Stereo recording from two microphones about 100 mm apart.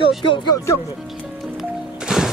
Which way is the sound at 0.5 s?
30° left (ahead or behind).